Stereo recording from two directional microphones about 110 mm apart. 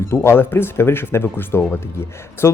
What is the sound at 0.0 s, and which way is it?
Speech, 25° left (ahead or behind).